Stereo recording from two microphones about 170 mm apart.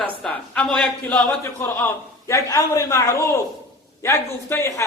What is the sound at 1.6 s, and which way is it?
A woman's voice, 15° left (ahead or behind).